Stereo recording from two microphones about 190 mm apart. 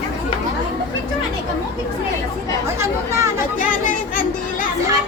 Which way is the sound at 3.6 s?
45° left (ahead or behind).